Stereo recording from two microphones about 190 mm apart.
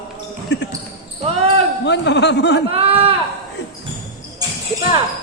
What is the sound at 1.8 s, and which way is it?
Speech, 70° left (ahead or behind).